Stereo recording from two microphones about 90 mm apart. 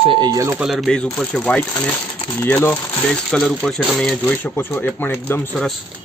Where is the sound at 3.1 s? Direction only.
5° left (ahead or behind).